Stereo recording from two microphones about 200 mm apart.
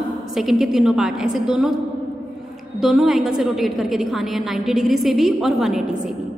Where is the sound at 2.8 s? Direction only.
Centre (ahead or behind).